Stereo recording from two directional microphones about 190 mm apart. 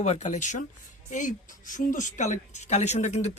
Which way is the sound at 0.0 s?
40° left (ahead or behind).